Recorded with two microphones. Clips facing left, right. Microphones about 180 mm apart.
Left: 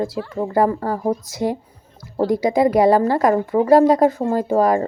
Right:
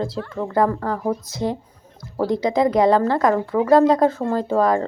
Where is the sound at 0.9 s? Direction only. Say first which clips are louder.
Left 2 dB; 30° left (ahead or behind).